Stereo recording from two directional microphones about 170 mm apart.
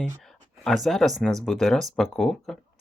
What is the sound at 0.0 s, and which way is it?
Speech, centre (ahead or behind).